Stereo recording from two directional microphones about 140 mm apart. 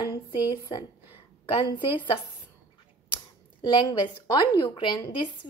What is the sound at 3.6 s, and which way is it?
A woman's voice, 30° left (ahead or behind).